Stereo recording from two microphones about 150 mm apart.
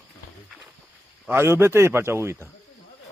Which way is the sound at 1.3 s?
15° right (ahead or behind).